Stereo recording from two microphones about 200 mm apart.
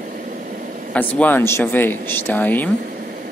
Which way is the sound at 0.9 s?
10° left (ahead or behind).